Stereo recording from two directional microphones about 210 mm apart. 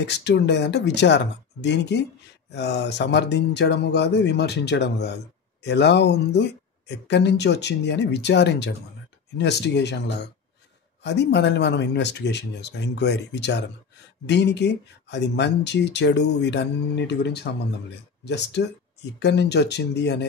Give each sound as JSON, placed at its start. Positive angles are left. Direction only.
{"t": 0.0, "sound": "speech", "side_deg": 55}